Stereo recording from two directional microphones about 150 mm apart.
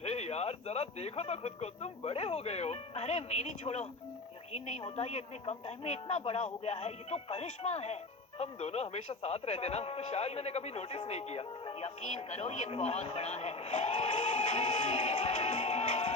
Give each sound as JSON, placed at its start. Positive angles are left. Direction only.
{"t": 0.0, "sound": "speech", "side_deg": 45}